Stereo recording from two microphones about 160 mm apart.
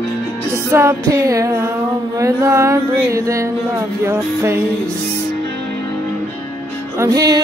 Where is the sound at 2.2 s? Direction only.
20° right (ahead or behind).